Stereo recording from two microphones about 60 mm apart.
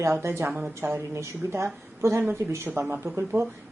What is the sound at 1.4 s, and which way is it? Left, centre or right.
A woman's voice, right.